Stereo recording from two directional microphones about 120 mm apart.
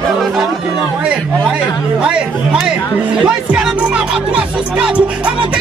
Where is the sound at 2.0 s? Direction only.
10° right (ahead or behind).